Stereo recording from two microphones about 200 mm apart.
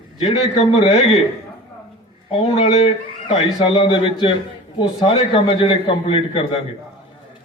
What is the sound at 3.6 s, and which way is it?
A man's voice, 25° left (ahead or behind).